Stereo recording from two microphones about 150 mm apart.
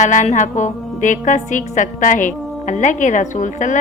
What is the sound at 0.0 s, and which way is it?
A woman's voice, 55° left (ahead or behind).